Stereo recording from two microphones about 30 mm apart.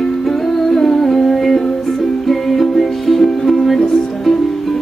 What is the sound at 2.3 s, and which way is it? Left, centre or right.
Music, centre.